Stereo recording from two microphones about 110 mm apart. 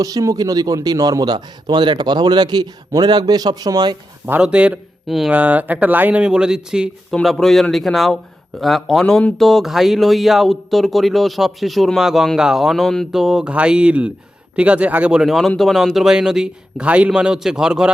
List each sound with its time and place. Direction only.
0.0 s speech: 30° right (ahead or behind)
4.3 s a man's voice: 10° right (ahead or behind)
5.3 s speech: 15° right (ahead or behind)
7.1 s a man's voice: 5° left (ahead or behind)